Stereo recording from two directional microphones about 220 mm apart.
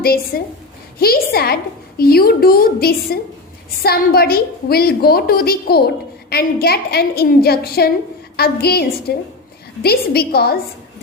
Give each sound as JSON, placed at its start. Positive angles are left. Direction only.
{"t": 0.0, "sound": "a woman's voice", "side_deg": 45}